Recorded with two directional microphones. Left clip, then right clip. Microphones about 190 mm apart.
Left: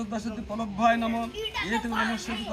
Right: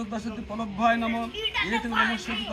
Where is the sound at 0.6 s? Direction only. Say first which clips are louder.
Even; 40° left (ahead or behind).